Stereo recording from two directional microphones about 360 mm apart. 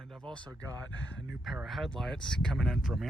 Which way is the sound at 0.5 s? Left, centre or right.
Centre.